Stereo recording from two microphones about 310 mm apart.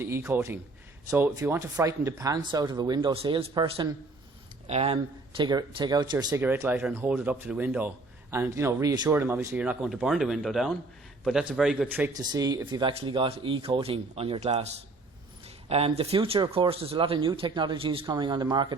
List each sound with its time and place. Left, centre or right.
0.0 s speech: centre
15.7 s speech: centre